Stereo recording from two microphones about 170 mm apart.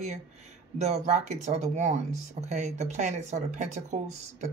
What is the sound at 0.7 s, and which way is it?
Speech, 40° right (ahead or behind).